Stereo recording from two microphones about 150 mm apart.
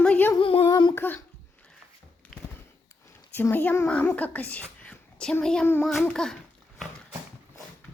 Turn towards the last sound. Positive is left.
turn(degrees=5)  # may be behind; listen again after turning